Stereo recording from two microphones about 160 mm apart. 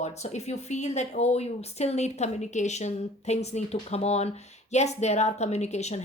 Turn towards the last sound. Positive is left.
turn(degrees=45)  # may be behind; listen again after turning